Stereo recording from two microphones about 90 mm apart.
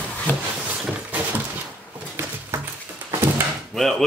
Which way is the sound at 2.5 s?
30° right (ahead or behind).